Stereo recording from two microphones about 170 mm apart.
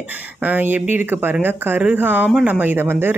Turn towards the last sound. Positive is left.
turn(degrees=-15)  # may be behind; listen again after turning